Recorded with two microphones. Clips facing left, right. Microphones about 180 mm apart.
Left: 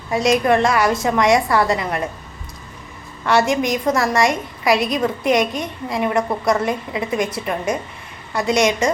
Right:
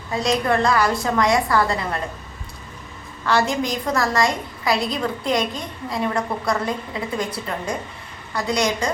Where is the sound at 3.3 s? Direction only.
20° left (ahead or behind).